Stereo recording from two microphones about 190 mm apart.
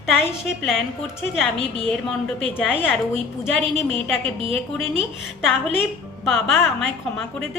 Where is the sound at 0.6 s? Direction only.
Centre (ahead or behind).